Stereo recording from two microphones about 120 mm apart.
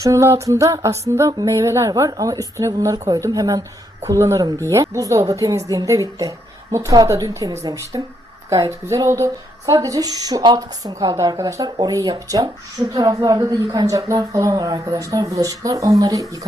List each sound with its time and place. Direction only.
0.0 s a woman's voice: 25° right (ahead or behind)